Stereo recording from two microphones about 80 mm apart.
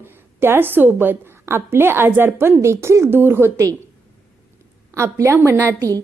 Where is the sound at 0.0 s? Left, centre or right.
Right.